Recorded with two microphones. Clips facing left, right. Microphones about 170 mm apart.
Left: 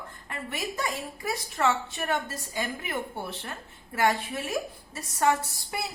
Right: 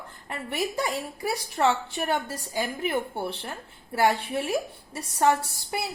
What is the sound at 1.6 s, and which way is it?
Speech, 25° right (ahead or behind).